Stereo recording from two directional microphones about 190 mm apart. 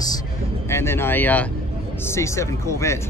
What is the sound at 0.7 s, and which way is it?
Speech, 15° left (ahead or behind).